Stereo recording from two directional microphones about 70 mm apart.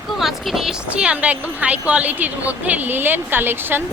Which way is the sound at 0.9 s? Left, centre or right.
Centre.